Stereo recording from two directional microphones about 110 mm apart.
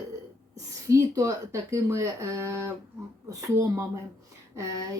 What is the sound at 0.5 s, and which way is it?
Speech, 30° right (ahead or behind).